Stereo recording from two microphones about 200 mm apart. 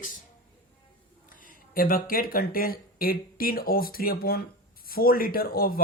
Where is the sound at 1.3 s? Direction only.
45° left (ahead or behind).